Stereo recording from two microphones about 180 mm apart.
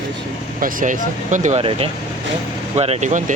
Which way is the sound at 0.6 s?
50° right (ahead or behind).